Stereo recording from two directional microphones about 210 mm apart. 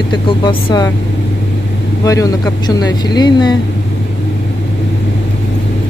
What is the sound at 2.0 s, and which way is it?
Speech, 15° left (ahead or behind).